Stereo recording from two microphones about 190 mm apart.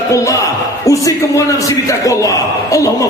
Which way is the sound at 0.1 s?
15° left (ahead or behind).